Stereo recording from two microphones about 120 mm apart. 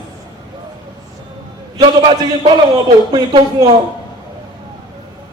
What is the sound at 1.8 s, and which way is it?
A man's voice, 40° right (ahead or behind).